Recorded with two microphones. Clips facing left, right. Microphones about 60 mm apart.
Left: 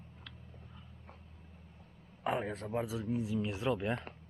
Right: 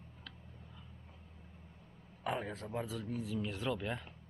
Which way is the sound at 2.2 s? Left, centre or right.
Centre.